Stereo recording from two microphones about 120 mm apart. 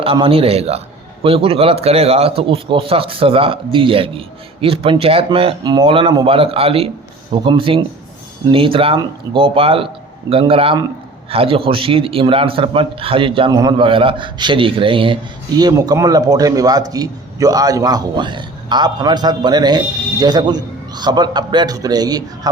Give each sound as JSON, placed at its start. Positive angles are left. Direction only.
{"t": 0.0, "sound": "a man's voice", "side_deg": -50}
{"t": 5.6, "sound": "a man's voice", "side_deg": -40}
{"t": 13.5, "sound": "a man's voice", "side_deg": -30}
{"t": 13.8, "sound": "a man's voice", "side_deg": -45}